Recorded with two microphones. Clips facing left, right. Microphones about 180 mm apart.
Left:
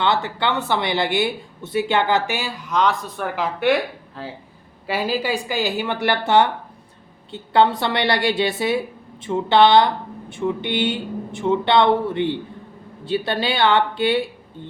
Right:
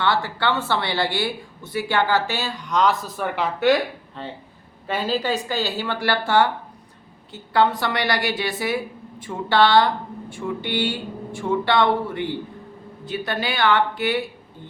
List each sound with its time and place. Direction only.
0.0 s speech: 20° left (ahead or behind)